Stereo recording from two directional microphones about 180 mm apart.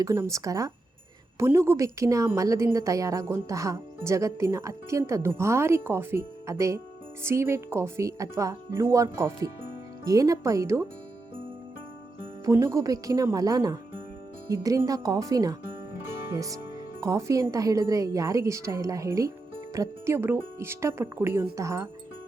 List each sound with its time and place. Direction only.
0.0 s a woman's voice: 15° right (ahead or behind)
12.5 s a woman's voice: 15° right (ahead or behind)